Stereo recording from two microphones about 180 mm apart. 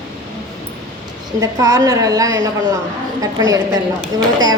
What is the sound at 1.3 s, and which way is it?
A woman's voice, 20° right (ahead or behind).